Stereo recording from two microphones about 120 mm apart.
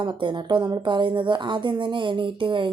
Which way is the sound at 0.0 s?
40° right (ahead or behind).